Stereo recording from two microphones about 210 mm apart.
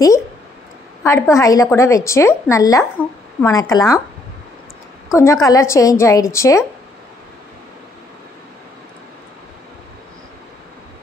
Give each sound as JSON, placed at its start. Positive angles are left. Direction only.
{"t": 1.0, "sound": "speech", "side_deg": 15}
{"t": 5.1, "sound": "speech", "side_deg": 15}